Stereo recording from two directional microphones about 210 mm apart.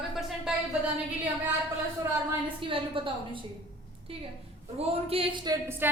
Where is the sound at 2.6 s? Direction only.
25° right (ahead or behind).